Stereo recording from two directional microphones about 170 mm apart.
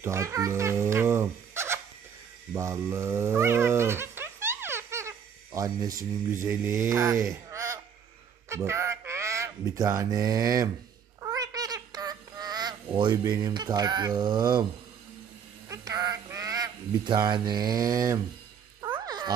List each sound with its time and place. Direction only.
0.0 s speech: 15° right (ahead or behind)
2.5 s dog: 20° right (ahead or behind)
5.9 s speech: 55° right (ahead or behind)
6.4 s mantra: 20° right (ahead or behind)
6.9 s speech: 20° right (ahead or behind)
11.1 s honk: 20° right (ahead or behind)
13.1 s speech: 20° right (ahead or behind)
15.7 s goose: 20° right (ahead or behind)
18.8 s music: 25° right (ahead or behind)